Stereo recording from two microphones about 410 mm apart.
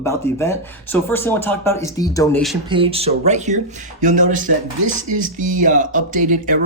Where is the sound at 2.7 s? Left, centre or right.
Centre.